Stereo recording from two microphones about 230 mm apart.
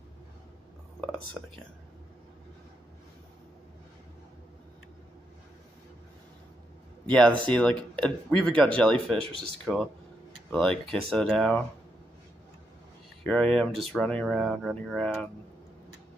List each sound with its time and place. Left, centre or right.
1.0 s whispering: centre
7.1 s speech: centre
13.2 s speech: centre